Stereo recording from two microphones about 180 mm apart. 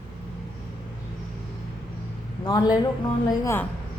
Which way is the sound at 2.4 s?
20° left (ahead or behind).